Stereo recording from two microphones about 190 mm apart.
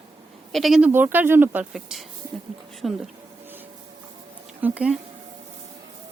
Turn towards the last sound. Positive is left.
turn(degrees=-5)  # may be behind; listen again after turning